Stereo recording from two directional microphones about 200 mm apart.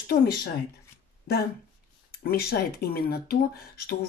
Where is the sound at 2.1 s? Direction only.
50° left (ahead or behind).